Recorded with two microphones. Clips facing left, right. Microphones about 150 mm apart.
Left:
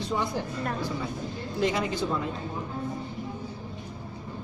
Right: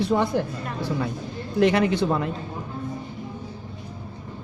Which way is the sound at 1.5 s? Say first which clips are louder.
Right 8 dB; 70° right (ahead or behind).